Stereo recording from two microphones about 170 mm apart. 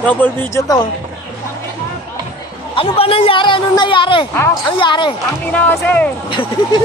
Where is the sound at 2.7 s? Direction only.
35° left (ahead or behind).